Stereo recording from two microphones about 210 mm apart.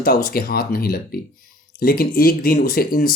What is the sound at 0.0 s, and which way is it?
Speech, 45° left (ahead or behind).